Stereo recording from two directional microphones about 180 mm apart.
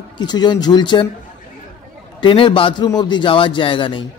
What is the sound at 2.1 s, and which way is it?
A man's voice, 25° left (ahead or behind).